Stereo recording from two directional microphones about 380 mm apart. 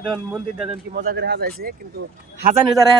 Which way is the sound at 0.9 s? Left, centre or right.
Right.